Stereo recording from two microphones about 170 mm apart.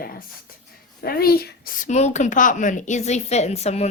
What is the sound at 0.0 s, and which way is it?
A woman's voice, 60° left (ahead or behind).